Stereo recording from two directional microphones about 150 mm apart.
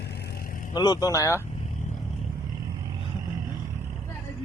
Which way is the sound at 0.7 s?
25° left (ahead or behind).